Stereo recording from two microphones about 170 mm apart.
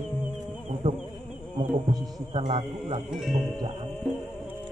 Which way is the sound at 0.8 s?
25° right (ahead or behind).